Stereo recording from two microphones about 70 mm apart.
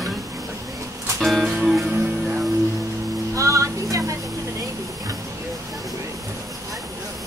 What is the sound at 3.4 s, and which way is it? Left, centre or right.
Music, right.